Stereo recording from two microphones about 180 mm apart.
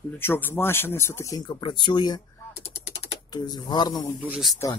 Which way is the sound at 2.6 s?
35° left (ahead or behind).